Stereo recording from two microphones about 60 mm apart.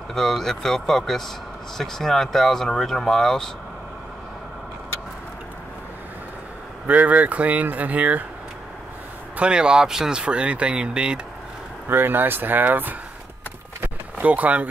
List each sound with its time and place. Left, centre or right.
0.1 s speech: centre
6.9 s speech: right
9.4 s speech: centre
11.9 s speech: right
14.2 s speech: right